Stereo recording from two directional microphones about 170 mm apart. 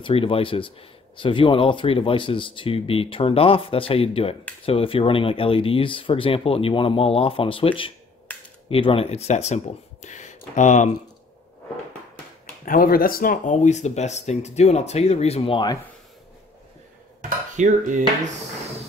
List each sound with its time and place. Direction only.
0.0 s speech: 30° left (ahead or behind)
12.6 s speech: 55° left (ahead or behind); by 15.8 s 30° left (ahead or behind)
17.6 s cutlery: 45° right (ahead or behind)